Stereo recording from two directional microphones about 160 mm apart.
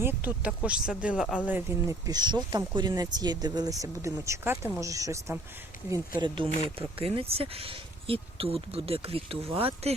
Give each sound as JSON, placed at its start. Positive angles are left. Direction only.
{"t": 0.0, "sound": "speech", "side_deg": -10}
{"t": 6.1, "sound": "speech", "side_deg": -30}